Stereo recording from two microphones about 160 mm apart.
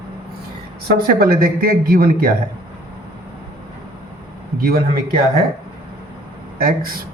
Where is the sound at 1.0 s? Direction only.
70° right (ahead or behind).